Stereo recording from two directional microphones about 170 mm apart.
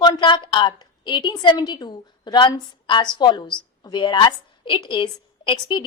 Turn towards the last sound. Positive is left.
turn(degrees=30)  # may be behind; listen again after turning